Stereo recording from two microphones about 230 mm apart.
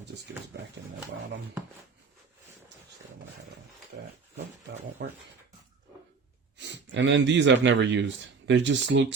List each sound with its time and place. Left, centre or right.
5.0 s speech: right
6.6 s speech: right